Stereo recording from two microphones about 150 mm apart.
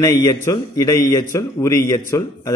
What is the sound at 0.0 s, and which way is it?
A man's voice, 20° left (ahead or behind).